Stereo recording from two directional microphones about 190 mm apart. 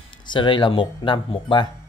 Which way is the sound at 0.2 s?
25° left (ahead or behind).